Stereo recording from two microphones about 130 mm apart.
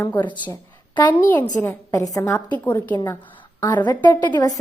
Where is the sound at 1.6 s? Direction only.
15° left (ahead or behind).